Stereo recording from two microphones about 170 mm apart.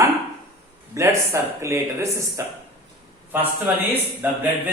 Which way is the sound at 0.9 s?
15° right (ahead or behind).